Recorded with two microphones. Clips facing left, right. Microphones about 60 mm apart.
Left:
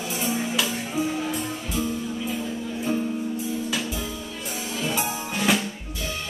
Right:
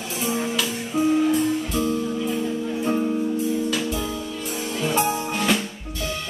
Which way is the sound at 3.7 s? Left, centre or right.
Centre.